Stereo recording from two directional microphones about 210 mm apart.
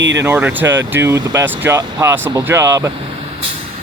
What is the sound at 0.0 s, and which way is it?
Speech, 60° right (ahead or behind).